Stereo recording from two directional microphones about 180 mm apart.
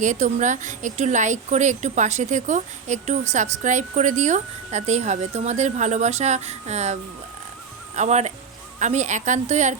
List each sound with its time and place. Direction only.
0.0 s a woman's voice: 40° right (ahead or behind)